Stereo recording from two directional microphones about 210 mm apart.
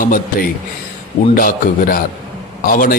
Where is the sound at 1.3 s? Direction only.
40° left (ahead or behind).